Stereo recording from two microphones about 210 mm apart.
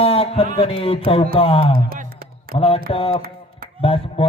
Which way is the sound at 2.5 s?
25° left (ahead or behind).